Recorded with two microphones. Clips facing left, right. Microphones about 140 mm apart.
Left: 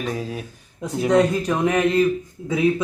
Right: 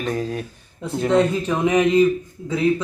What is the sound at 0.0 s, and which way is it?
Speech, 5° left (ahead or behind).